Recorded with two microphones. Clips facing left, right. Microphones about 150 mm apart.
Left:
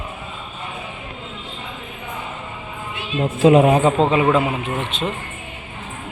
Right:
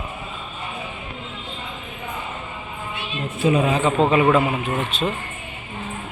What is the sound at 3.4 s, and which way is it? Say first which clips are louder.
Speech: left 7 dB; 60° left (ahead or behind).